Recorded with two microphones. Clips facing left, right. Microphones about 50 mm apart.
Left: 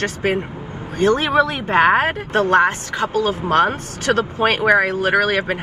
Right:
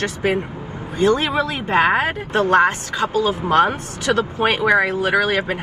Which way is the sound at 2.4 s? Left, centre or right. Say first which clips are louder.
Even; right.